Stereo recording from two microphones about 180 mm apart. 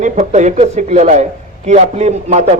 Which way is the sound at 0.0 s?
40° right (ahead or behind).